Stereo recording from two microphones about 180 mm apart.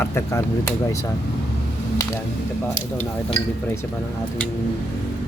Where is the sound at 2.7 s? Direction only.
45° left (ahead or behind).